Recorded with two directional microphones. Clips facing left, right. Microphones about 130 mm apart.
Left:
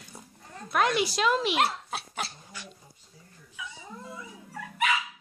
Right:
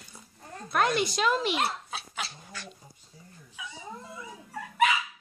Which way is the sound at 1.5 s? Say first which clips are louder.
Left 3 dB; 75° left (ahead or behind).